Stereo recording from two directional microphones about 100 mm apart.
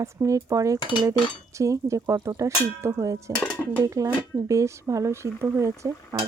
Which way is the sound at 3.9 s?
30° right (ahead or behind).